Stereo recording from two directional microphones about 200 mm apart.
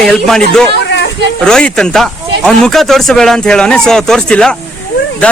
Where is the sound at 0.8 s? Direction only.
60° left (ahead or behind).